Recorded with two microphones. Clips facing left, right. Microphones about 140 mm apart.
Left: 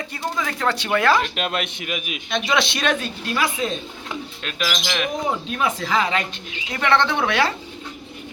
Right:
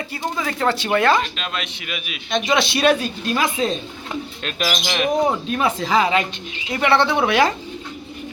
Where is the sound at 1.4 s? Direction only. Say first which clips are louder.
Left 4 dB; 55° left (ahead or behind).